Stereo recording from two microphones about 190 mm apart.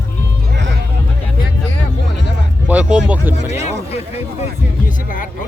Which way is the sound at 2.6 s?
5° right (ahead or behind).